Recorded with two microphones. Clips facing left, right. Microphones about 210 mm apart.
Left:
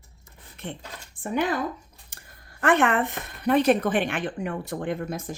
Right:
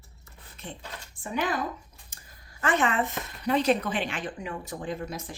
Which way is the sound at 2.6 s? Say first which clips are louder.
Left 4 dB; 60° left (ahead or behind).